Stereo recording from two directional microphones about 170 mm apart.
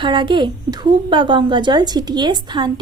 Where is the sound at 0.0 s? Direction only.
30° right (ahead or behind).